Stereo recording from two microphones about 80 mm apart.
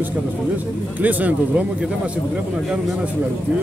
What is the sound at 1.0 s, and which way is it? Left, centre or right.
Speech, centre.